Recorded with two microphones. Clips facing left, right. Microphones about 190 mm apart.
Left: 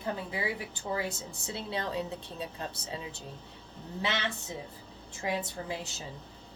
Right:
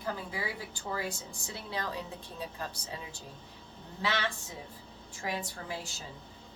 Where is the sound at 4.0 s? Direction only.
20° left (ahead or behind).